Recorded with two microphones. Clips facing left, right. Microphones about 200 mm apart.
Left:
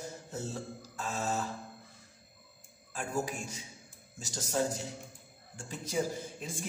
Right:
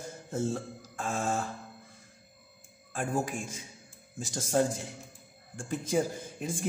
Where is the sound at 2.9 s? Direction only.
50° right (ahead or behind).